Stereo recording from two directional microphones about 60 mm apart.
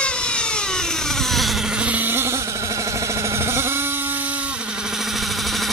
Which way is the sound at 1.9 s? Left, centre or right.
Right.